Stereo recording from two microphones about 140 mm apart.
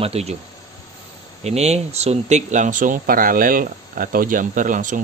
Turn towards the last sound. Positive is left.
turn(degrees=-70)  # may be behind; listen again after turning